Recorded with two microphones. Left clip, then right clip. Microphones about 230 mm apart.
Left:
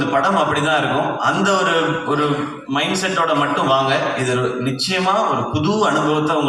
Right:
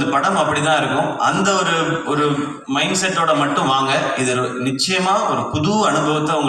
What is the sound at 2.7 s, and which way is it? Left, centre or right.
A man's voice, right.